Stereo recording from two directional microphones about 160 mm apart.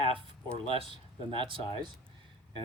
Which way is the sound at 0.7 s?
35° right (ahead or behind).